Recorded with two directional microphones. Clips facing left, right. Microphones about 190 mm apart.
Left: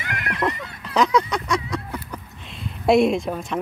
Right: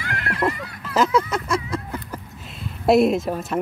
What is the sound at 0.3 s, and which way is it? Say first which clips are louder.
Neigh: right 1 dB; centre (ahead or behind).